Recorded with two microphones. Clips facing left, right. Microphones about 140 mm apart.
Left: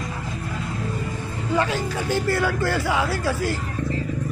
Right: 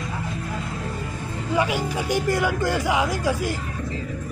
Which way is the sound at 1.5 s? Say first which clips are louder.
Even; 15° right (ahead or behind).